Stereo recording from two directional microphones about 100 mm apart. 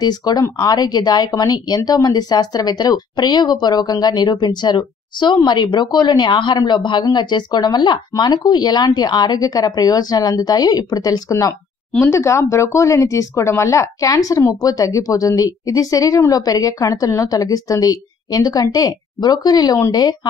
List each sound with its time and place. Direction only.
0.0 s a woman's voice: 40° left (ahead or behind)